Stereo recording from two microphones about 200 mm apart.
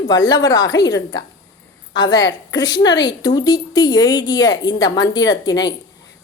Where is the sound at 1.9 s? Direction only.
20° left (ahead or behind).